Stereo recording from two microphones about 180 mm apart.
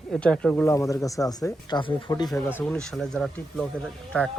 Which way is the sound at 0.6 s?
15° left (ahead or behind).